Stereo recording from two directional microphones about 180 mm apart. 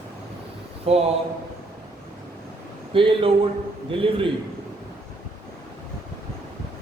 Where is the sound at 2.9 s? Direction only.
30° right (ahead or behind).